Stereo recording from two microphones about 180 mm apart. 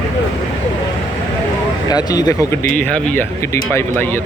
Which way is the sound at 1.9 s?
20° left (ahead or behind).